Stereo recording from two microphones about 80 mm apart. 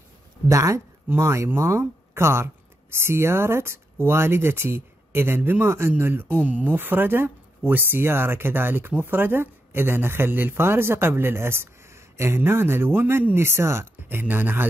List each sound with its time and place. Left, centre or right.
0.5 s speech: right
1.0 s speech: right